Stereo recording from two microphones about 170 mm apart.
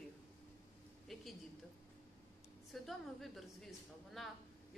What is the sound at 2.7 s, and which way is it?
A woman's voice, centre (ahead or behind).